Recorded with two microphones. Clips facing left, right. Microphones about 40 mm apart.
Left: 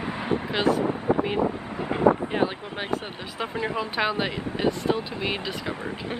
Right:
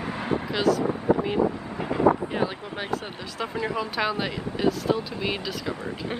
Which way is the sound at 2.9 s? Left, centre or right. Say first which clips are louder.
Left 1 dB; centre.